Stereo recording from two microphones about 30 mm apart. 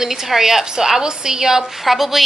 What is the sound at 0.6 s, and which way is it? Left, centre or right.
A woman's voice, right.